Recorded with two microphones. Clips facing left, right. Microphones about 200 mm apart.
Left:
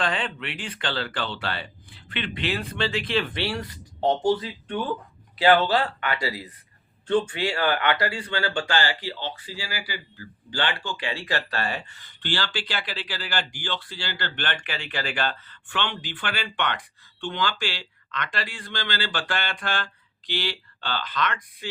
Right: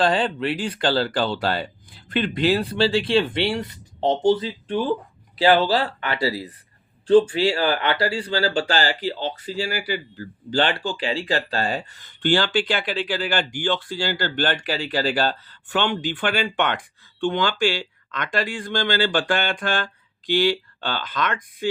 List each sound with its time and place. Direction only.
0.0 s speech: 35° right (ahead or behind)